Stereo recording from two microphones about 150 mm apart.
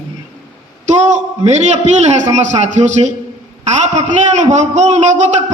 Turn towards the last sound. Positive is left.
turn(degrees=-50)  # may be behind; listen again after turning